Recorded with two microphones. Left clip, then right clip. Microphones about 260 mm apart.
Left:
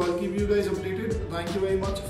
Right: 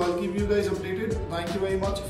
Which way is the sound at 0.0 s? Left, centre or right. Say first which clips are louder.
Even; centre.